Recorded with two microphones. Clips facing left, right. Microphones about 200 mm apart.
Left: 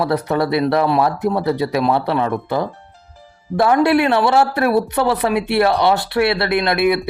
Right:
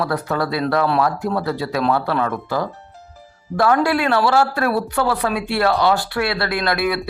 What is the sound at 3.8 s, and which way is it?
Speech, 20° left (ahead or behind).